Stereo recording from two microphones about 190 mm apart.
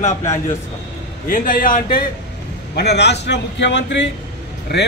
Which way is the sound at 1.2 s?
45° left (ahead or behind).